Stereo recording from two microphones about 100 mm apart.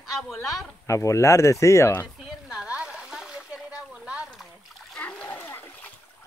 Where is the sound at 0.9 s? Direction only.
30° left (ahead or behind).